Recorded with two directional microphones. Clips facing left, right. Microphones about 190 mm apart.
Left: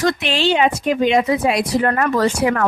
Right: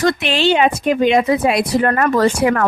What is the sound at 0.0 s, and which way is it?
Speech, 60° right (ahead or behind).